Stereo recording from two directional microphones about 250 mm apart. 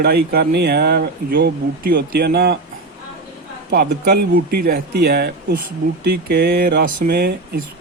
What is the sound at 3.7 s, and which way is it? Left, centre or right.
A man's voice, right.